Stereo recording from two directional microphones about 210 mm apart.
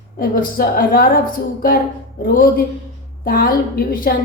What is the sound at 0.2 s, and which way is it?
A woman's voice, 45° left (ahead or behind).